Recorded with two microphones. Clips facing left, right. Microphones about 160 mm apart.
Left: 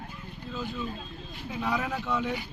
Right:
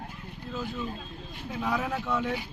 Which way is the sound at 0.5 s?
5° right (ahead or behind).